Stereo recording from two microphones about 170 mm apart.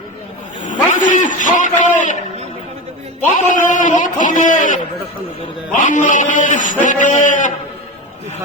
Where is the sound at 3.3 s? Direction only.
50° left (ahead or behind).